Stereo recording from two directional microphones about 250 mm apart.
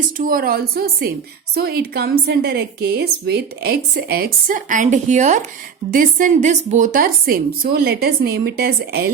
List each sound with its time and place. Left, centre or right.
0.2 s a woman's voice: right